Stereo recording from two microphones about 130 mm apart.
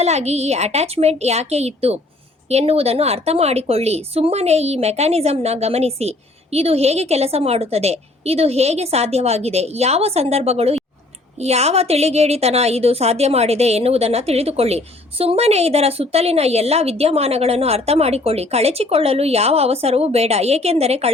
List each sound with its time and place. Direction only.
0.0 s a woman's voice: 55° right (ahead or behind)